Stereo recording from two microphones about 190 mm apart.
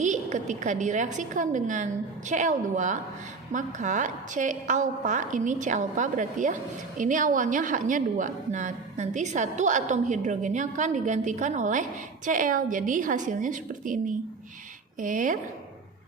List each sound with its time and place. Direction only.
0.0 s a woman's voice: 40° right (ahead or behind)